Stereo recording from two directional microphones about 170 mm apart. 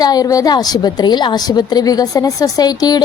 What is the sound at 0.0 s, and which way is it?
A woman's voice, 20° left (ahead or behind).